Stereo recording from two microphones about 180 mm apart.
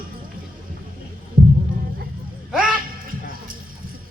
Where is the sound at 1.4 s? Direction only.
50° right (ahead or behind).